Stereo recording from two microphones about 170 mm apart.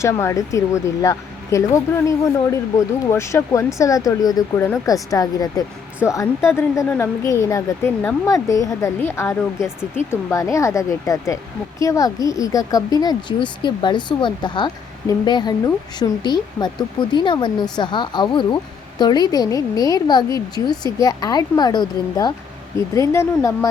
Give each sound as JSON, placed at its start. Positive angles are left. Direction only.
{"t": 0.0, "sound": "speech", "side_deg": 15}